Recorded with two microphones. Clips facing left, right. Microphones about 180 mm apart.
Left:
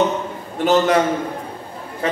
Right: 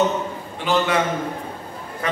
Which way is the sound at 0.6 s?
45° left (ahead or behind).